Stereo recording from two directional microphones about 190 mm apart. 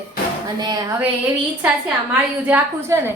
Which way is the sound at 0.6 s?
20° right (ahead or behind).